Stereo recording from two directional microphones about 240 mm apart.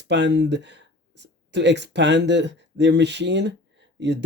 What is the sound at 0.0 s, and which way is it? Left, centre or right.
Speech, right.